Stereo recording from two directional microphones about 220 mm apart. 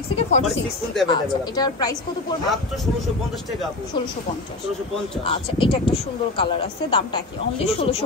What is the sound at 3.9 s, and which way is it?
Speech, 20° left (ahead or behind).